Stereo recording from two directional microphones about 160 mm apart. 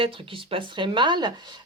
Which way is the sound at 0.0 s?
35° right (ahead or behind).